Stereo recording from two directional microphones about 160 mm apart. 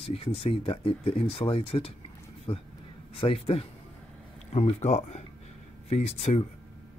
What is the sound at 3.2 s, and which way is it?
Speech, 35° left (ahead or behind).